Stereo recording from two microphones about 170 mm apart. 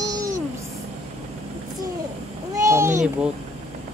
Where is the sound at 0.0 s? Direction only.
20° right (ahead or behind).